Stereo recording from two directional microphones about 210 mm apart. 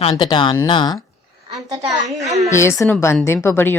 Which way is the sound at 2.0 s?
30° right (ahead or behind).